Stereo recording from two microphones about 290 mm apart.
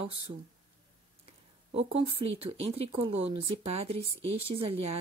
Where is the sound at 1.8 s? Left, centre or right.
Centre.